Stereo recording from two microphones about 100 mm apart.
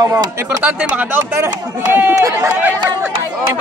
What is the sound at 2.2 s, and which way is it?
Speech, 30° right (ahead or behind).